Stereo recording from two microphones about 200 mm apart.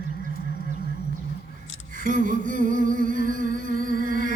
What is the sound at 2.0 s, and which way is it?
Music, 40° right (ahead or behind).